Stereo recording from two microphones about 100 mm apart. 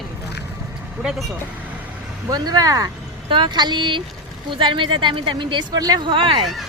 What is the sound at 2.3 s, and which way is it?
Vehicle, 40° right (ahead or behind).